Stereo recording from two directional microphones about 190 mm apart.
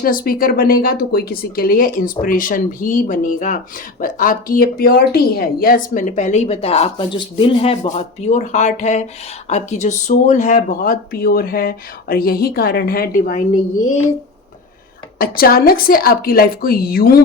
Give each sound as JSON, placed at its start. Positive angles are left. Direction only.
{"t": 0.0, "sound": "speech", "side_deg": 50}
{"t": 15.2, "sound": "speech", "side_deg": 50}